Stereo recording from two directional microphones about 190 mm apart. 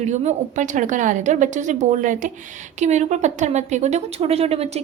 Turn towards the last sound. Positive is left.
turn(degrees=-35)  # may be behind; listen again after turning